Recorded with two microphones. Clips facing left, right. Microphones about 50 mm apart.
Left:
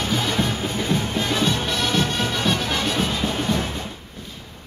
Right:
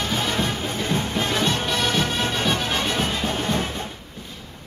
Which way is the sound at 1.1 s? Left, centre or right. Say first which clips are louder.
Right 1 dB; right.